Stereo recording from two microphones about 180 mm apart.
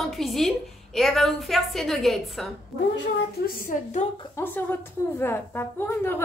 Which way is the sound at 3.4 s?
50° left (ahead or behind).